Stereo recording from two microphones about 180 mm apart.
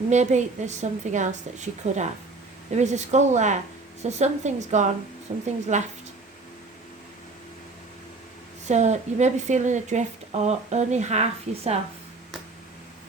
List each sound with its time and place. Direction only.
0.1 s a woman's voice: 40° right (ahead or behind)
8.6 s a woman's voice: 40° right (ahead or behind)